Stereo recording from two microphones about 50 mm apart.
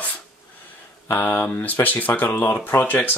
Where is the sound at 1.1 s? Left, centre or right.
Left.